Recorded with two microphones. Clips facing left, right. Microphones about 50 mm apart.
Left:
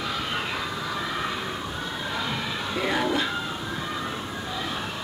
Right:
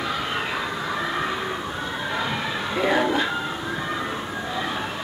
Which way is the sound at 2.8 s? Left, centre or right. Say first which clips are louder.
Right 4 dB; centre.